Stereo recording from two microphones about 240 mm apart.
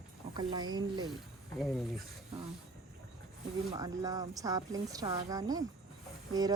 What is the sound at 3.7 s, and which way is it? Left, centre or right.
Speech, centre.